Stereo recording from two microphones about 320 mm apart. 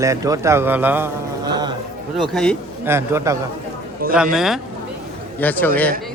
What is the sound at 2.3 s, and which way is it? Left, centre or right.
A man's voice, centre.